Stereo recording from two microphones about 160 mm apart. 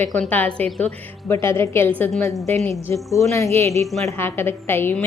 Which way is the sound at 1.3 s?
15° left (ahead or behind).